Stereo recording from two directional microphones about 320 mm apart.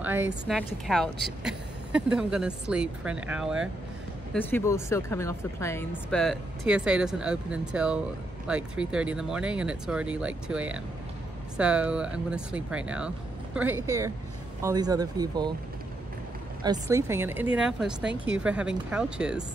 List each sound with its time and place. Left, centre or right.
0.0 s speech: centre
16.6 s speech: centre